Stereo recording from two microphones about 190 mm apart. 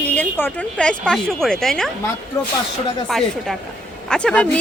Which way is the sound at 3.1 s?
Centre (ahead or behind).